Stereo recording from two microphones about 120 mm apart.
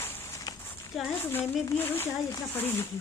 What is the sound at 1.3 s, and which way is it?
Speech, 15° left (ahead or behind).